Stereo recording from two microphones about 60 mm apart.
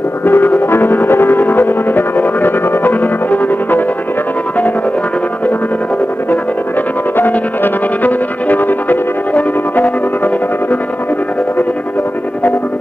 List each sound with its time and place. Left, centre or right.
0.2 s music: left
7.2 s music: left